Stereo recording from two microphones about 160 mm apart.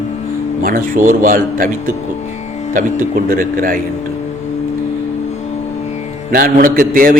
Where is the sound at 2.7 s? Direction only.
60° right (ahead or behind).